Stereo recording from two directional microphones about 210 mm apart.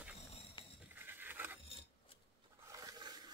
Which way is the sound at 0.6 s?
20° left (ahead or behind).